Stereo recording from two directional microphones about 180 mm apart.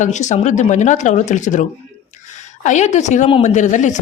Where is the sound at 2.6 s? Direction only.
40° left (ahead or behind).